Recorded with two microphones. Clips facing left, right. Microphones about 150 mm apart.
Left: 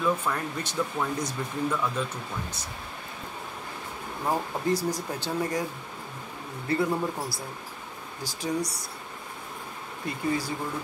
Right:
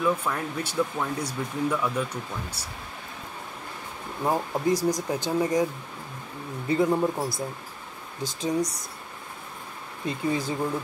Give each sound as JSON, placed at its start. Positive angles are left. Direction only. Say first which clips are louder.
{"t": 0.0, "sound": "speech", "louder": "right 1 dB", "side_deg": -5}
{"t": 4.2, "sound": "speech", "louder": "right 3 dB", "side_deg": -15}
{"t": 6.7, "sound": "speech", "louder": "right 4 dB", "side_deg": -20}
{"t": 10.0, "sound": "speech", "louder": "right 2 dB", "side_deg": -20}